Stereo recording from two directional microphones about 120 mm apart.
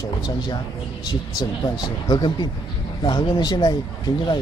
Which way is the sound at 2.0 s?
35° left (ahead or behind).